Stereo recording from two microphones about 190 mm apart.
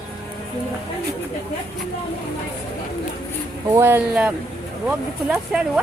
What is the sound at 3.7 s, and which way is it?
Speech, 10° right (ahead or behind).